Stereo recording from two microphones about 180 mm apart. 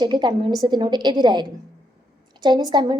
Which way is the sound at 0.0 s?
25° right (ahead or behind).